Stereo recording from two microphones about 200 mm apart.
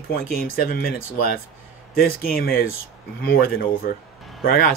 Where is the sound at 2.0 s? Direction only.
45° left (ahead or behind).